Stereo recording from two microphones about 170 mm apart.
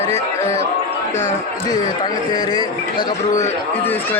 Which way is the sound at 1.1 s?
45° left (ahead or behind).